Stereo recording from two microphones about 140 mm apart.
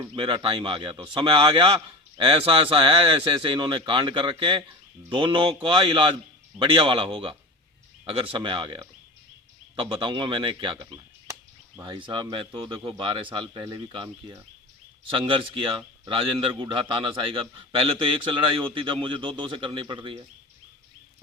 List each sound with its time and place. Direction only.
0.1 s a man's voice: 40° right (ahead or behind)
10.8 s a sound: 20° right (ahead or behind)
11.8 s a man's voice: 30° right (ahead or behind)
15.1 s a man's voice: 35° right (ahead or behind)